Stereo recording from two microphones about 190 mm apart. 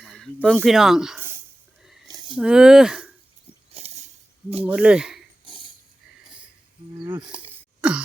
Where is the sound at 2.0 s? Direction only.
25° right (ahead or behind).